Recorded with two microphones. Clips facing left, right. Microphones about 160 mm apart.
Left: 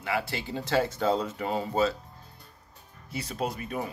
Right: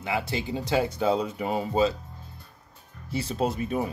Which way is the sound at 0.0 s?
20° right (ahead or behind).